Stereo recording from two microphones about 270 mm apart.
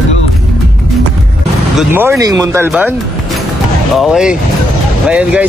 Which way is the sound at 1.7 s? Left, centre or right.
Centre.